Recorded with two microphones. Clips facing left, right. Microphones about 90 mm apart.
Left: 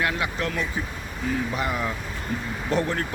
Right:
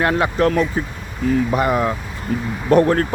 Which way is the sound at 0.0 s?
45° right (ahead or behind).